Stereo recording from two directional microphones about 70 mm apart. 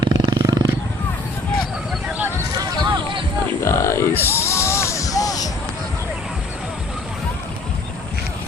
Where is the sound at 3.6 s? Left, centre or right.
Left.